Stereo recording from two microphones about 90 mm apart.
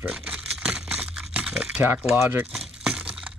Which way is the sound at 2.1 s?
25° right (ahead or behind).